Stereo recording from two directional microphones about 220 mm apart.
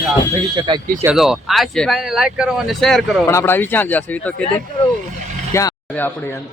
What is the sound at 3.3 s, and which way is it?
Speech, 10° left (ahead or behind).